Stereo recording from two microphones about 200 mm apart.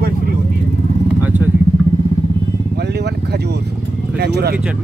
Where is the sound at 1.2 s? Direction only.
10° right (ahead or behind).